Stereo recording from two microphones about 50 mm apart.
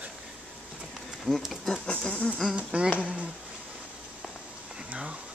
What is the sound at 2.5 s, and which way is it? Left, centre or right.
Speech, right.